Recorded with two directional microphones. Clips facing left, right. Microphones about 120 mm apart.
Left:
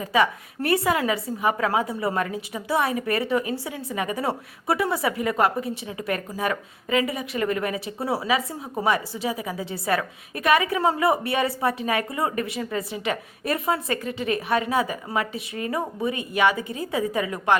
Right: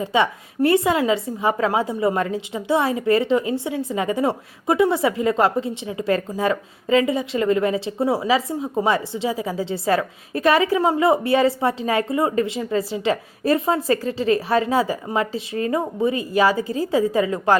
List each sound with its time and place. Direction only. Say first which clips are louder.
0.0 s a woman's voice: right 2 dB; 25° right (ahead or behind)